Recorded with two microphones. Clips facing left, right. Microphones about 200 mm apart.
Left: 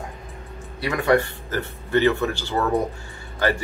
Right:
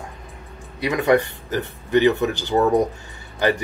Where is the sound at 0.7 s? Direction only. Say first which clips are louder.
Right 2 dB; 20° right (ahead or behind).